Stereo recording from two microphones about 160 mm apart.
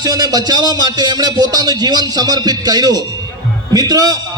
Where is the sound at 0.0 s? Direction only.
25° right (ahead or behind).